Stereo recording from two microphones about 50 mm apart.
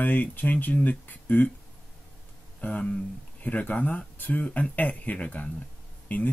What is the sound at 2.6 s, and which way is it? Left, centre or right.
Speech, left.